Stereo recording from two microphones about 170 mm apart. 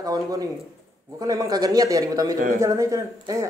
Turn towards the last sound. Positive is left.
turn(degrees=-20)  # may be behind; listen again after turning